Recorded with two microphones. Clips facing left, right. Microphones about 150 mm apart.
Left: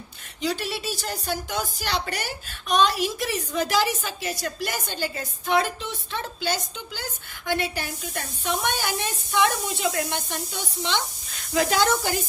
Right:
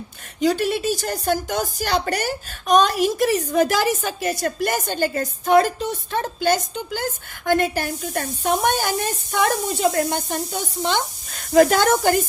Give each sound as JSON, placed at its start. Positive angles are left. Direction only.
{"t": 0.3, "sound": "speech", "side_deg": -50}